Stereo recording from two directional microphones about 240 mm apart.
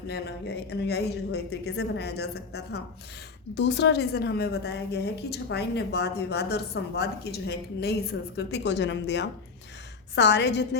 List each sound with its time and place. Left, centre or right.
0.1 s a woman's voice: left